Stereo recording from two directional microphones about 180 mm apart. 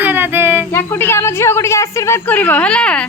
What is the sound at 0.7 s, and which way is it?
A woman's voice, 10° left (ahead or behind).